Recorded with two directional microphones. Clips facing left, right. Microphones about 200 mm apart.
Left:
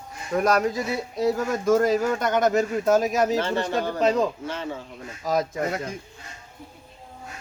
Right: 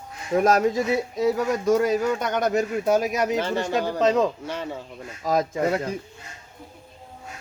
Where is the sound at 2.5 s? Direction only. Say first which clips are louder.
Left 1 dB; 15° right (ahead or behind).